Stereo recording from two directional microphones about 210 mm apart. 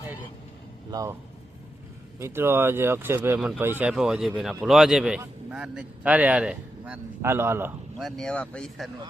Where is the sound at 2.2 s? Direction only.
10° right (ahead or behind).